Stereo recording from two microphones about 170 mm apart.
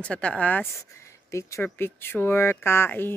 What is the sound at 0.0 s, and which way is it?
Speech, 5° left (ahead or behind).